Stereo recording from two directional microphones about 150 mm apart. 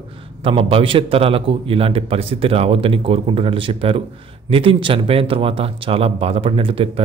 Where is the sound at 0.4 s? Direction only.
40° right (ahead or behind).